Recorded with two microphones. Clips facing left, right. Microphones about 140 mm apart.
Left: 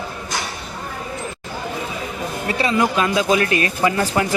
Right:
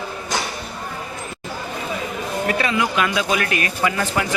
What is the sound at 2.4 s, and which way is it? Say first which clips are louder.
Speech: left 3 dB; 30° left (ahead or behind).